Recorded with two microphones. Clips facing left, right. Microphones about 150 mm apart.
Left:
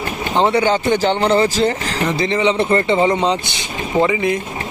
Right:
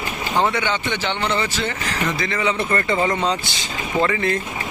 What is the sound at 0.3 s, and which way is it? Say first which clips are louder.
Speech: left 6 dB; 30° left (ahead or behind).